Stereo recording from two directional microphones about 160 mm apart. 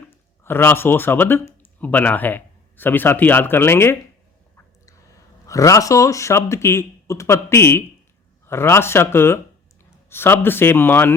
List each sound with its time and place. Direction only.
0.1 s speech: 15° left (ahead or behind)
5.5 s speech: 20° left (ahead or behind)